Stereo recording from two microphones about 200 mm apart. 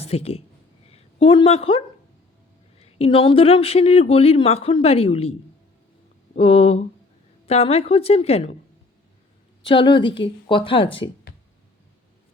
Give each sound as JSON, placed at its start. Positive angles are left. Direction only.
{"t": 0.0, "sound": "a woman's voice", "side_deg": 30}
{"t": 6.3, "sound": "a woman's voice", "side_deg": 30}
{"t": 9.6, "sound": "a woman's voice", "side_deg": 25}